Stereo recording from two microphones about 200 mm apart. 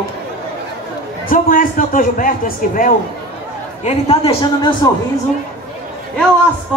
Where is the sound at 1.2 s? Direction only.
45° left (ahead or behind).